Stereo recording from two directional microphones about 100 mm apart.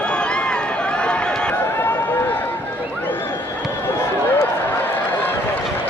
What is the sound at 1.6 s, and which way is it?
Run, 20° left (ahead or behind).